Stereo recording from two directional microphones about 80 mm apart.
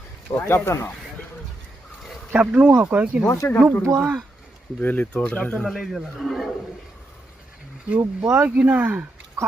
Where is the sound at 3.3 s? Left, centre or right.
Left.